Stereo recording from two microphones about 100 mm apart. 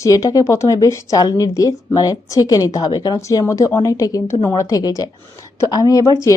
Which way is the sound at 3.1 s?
30° left (ahead or behind).